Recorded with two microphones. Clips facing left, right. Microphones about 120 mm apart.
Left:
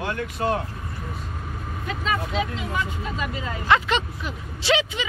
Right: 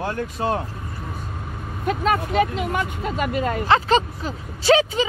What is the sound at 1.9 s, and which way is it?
Speech, 55° right (ahead or behind).